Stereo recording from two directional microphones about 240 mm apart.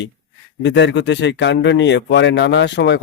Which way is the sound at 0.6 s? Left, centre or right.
Left.